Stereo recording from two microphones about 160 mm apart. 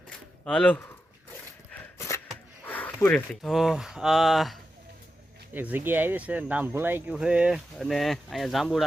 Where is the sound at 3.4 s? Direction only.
Centre (ahead or behind).